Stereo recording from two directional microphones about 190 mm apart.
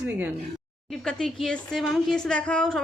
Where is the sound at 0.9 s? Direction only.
Centre (ahead or behind).